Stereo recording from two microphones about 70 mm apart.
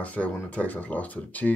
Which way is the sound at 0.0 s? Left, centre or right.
Left.